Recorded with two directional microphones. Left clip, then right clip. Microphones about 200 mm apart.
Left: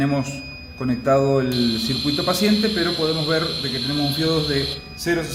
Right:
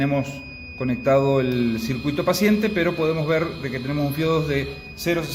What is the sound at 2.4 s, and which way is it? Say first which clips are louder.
Speech: even; 35° right (ahead or behind).